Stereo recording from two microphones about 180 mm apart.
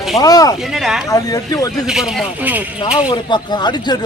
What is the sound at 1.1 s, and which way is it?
Speech, 20° left (ahead or behind).